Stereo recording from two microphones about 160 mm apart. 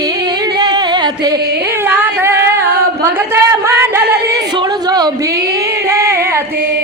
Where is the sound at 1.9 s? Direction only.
15° right (ahead or behind).